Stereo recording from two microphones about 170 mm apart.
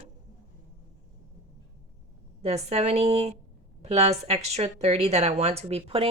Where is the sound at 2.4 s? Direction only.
40° right (ahead or behind).